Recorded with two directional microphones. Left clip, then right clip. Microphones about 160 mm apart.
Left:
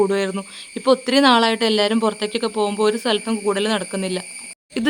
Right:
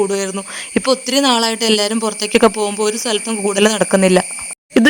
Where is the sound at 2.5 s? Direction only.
20° right (ahead or behind).